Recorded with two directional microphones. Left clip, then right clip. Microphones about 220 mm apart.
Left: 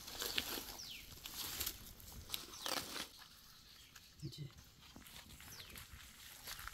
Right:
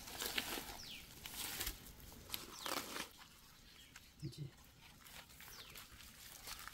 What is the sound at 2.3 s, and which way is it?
Biting, centre (ahead or behind).